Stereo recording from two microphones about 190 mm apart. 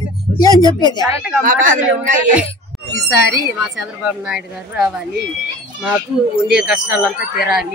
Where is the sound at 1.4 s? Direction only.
40° right (ahead or behind).